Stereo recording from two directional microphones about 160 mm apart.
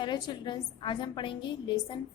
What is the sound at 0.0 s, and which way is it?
A woman's voice, 30° left (ahead or behind).